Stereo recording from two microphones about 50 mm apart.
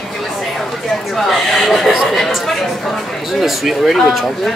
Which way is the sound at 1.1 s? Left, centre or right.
Centre.